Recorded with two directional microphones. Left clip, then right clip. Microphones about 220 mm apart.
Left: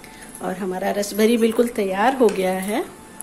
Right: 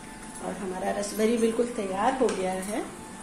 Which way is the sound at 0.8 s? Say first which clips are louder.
Left 7 dB; 45° left (ahead or behind).